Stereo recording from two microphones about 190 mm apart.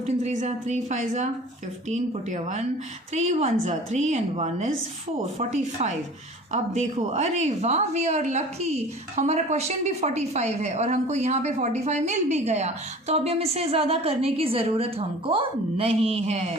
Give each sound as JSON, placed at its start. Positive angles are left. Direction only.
{"t": 0.0, "sound": "a woman's voice", "side_deg": -40}